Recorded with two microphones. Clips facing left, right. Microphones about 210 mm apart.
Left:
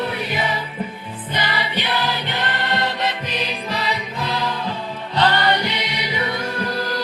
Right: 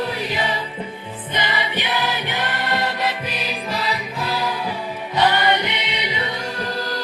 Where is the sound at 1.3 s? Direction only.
15° right (ahead or behind).